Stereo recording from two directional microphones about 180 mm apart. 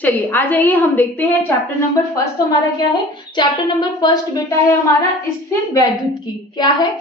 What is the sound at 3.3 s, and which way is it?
Speech, 20° left (ahead or behind).